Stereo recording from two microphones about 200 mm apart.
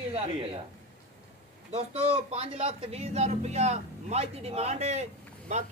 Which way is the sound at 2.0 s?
30° right (ahead or behind).